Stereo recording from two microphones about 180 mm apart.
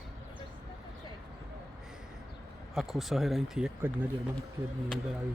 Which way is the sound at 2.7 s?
Centre (ahead or behind).